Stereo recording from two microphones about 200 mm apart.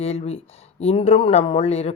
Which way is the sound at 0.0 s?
30° left (ahead or behind).